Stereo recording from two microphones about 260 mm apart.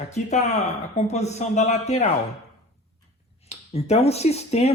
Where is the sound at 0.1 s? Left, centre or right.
Left.